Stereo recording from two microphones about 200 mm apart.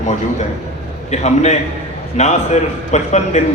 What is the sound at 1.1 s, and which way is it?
A man's voice, 35° left (ahead or behind).